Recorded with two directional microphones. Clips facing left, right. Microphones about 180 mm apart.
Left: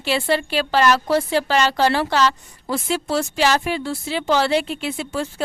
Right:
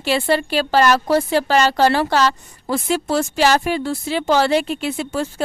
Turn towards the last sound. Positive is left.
turn(degrees=-45)  # may be behind; listen again after turning